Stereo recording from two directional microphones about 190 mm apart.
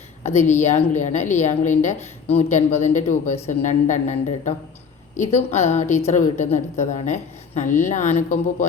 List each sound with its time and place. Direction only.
0.2 s a woman's voice: 35° left (ahead or behind)